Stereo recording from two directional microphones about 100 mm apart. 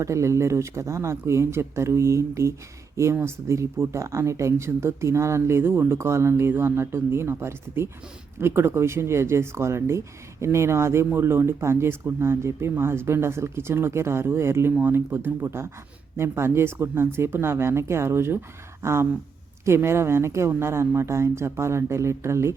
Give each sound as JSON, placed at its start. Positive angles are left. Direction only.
{"t": 0.0, "sound": "speech", "side_deg": -30}